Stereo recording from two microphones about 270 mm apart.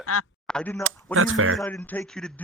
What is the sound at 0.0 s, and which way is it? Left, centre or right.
Speech, left.